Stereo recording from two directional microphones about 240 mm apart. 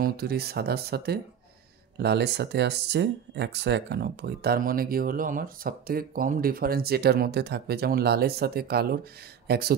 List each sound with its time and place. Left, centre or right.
0.0 s speech: right